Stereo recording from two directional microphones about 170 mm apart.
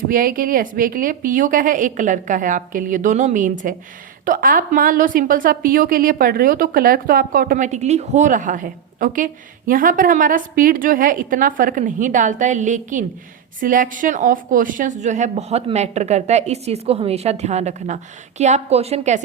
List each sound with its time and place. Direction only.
0.1 s a woman's voice: 55° right (ahead or behind); by 19.2 s 40° right (ahead or behind)